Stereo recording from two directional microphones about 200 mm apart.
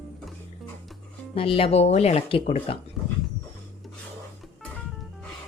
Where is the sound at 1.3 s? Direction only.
30° left (ahead or behind).